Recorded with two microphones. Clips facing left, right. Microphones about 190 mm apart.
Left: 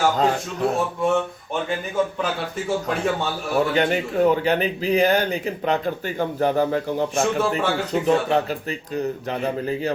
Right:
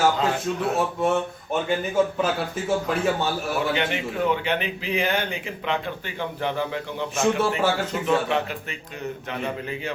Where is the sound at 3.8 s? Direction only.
40° left (ahead or behind).